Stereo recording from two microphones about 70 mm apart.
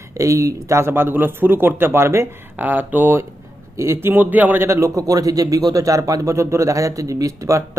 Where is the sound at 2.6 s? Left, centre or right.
Right.